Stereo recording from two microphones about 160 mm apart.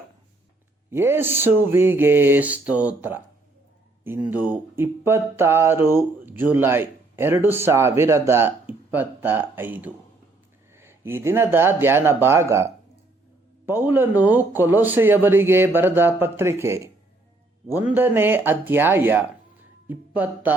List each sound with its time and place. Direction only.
0.9 s speech: 15° right (ahead or behind)